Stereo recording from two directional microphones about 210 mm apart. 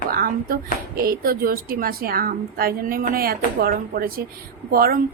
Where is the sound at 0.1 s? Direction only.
45° right (ahead or behind).